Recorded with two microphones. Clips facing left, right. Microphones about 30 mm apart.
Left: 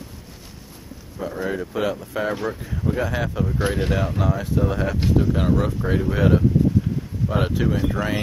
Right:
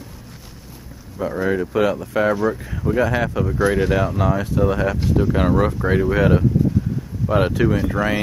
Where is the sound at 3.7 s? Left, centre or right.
Left.